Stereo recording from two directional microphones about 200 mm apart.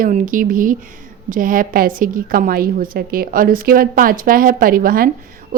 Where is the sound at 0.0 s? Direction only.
45° right (ahead or behind).